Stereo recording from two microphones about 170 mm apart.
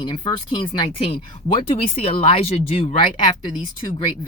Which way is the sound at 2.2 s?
35° left (ahead or behind).